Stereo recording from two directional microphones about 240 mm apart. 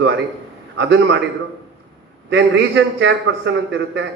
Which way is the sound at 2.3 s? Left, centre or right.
Right.